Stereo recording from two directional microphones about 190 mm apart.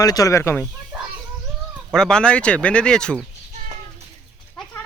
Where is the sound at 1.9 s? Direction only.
5° left (ahead or behind).